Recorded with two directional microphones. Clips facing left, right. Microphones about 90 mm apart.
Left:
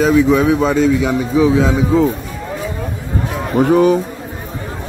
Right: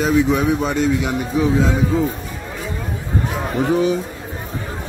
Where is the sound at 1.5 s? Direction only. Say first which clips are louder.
Left 4 dB; 90° left.